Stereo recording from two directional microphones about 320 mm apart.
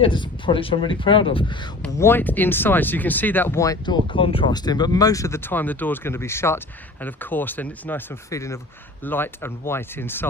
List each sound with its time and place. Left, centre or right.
0.0 s speech: centre